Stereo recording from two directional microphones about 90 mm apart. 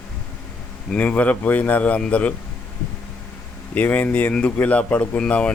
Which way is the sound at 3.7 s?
15° left (ahead or behind).